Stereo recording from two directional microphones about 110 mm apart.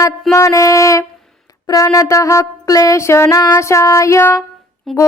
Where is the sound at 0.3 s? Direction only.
30° left (ahead or behind).